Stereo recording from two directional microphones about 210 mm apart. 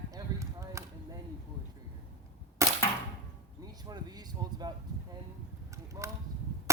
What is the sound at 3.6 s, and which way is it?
Speech, 20° right (ahead or behind).